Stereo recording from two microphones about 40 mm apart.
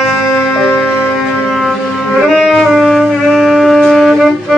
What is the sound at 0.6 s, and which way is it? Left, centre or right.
Music, left.